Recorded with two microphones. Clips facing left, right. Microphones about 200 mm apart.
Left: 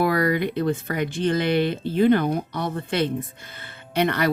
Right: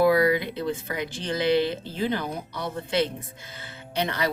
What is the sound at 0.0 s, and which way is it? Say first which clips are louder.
Speech: right 1 dB; 60° left (ahead or behind).